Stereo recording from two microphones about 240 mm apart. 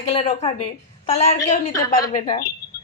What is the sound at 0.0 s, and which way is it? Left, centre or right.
A woman's voice, left.